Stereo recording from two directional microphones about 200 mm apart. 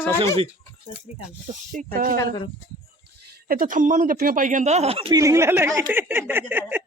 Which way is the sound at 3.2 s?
45° right (ahead or behind).